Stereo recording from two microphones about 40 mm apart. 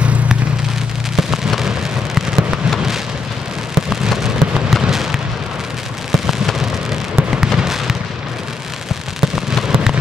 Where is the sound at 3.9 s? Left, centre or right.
Centre.